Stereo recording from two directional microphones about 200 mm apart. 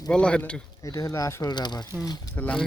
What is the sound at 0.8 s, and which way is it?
Speech, 15° left (ahead or behind).